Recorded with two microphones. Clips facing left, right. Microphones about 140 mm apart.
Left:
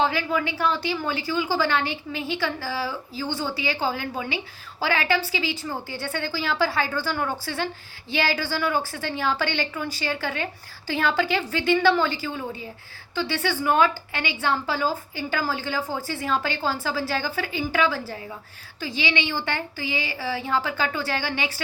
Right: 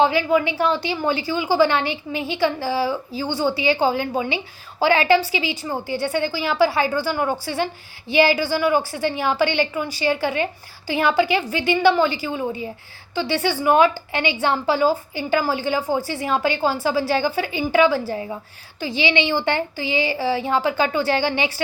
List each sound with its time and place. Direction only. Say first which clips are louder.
0.0 s a woman's voice: right 6 dB; 20° right (ahead or behind)